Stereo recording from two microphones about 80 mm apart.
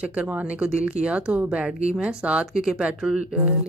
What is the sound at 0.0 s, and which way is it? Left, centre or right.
Speech, centre.